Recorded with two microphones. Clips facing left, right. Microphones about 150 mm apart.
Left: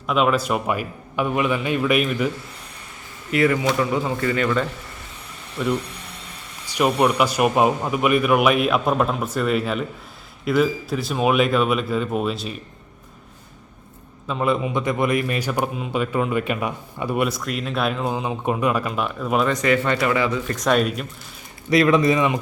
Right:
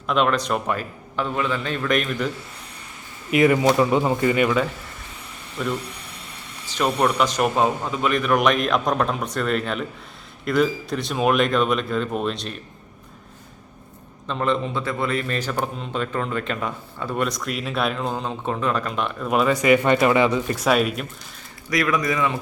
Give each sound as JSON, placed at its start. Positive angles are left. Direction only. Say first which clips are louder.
{"t": 0.1, "sound": "a man's voice", "louder": "left 1 dB", "side_deg": 5}
{"t": 3.3, "sound": "a man's voice", "louder": "right 2 dB", "side_deg": -20}
{"t": 5.6, "sound": "speech", "louder": "left 3 dB", "side_deg": 0}
{"t": 6.7, "sound": "a man's voice", "louder": "left 2 dB", "side_deg": 10}
{"t": 14.3, "sound": "a man's voice", "louder": "left 1 dB", "side_deg": 10}
{"t": 19.5, "sound": "speech", "louder": "right 3 dB", "side_deg": -15}
{"t": 20.6, "sound": "speech", "louder": "left 2 dB", "side_deg": -5}
{"t": 21.7, "sound": "speech", "louder": "left 6 dB", "side_deg": 25}